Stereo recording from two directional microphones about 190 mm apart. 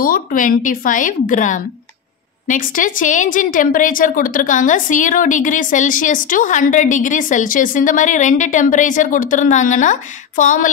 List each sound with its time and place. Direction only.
0.0 s a woman's voice: 45° left (ahead or behind)